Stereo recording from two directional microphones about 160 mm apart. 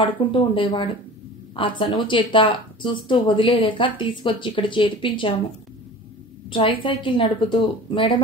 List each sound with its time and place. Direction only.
0.0 s speech: 30° left (ahead or behind)
6.5 s speech: 35° left (ahead or behind)